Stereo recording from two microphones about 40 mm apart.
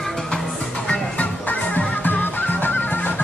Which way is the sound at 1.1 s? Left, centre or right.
Left.